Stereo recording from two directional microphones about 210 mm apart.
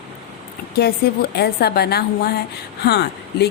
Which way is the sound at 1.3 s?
50° left (ahead or behind).